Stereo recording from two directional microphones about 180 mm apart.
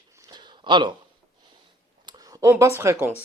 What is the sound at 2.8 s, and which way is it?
Speech, 15° right (ahead or behind).